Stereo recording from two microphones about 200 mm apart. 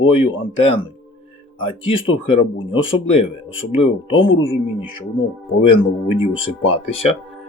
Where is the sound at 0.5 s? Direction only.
30° left (ahead or behind).